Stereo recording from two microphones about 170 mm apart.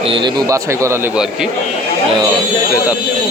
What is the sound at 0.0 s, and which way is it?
A man's voice, 30° right (ahead or behind).